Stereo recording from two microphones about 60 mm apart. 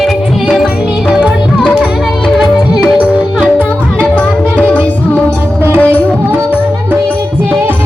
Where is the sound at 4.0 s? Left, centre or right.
Left.